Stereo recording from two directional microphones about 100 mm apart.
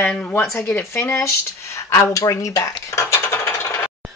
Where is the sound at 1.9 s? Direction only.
35° left (ahead or behind).